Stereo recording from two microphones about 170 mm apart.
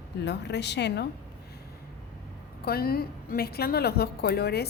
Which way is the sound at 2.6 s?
65° left (ahead or behind).